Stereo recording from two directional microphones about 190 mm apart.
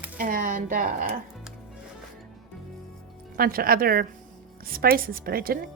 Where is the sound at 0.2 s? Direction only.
45° right (ahead or behind).